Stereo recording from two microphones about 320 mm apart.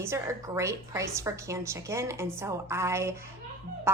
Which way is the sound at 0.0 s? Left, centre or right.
Centre.